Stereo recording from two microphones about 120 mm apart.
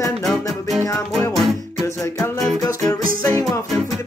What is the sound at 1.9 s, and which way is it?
Music, 25° left (ahead or behind).